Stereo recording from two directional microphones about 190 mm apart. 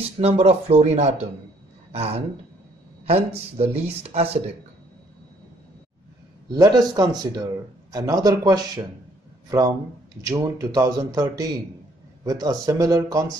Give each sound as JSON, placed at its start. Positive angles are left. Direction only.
{"t": 0.0, "sound": "speech", "side_deg": -30}
{"t": 6.5, "sound": "speech", "side_deg": -20}